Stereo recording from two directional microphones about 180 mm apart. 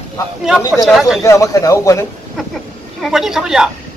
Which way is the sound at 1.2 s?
20° left (ahead or behind).